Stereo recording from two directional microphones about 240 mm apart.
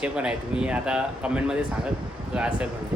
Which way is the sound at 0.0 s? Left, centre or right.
Centre.